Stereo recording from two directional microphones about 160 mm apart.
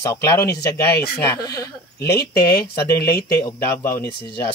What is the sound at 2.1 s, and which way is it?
Speech, 80° left.